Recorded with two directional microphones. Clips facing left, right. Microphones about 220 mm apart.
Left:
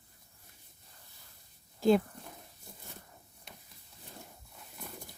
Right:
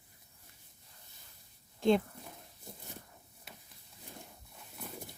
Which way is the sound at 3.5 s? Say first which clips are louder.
Even; 5° right (ahead or behind).